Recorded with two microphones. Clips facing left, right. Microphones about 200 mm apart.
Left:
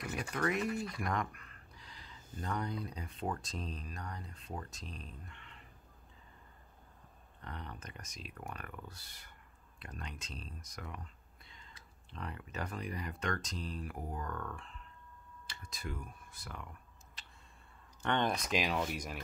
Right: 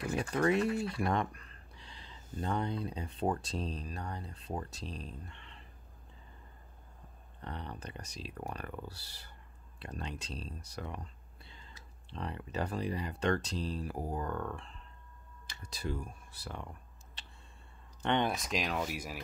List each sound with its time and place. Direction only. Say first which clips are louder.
0.0 s speech: right 5 dB; 30° right (ahead or behind)
7.4 s speech: right 4 dB; 30° right (ahead or behind)
15.7 s speech: right 6 dB; 30° right (ahead or behind)
18.0 s speech: right 2 dB; 15° right (ahead or behind)
18.3 s speech: left 1 dB; centre (ahead or behind)